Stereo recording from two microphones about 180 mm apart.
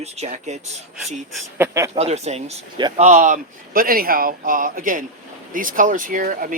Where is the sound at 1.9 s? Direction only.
35° right (ahead or behind).